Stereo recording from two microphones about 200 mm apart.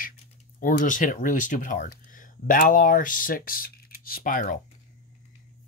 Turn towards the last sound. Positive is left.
turn(degrees=40)  # may be behind; listen again after turning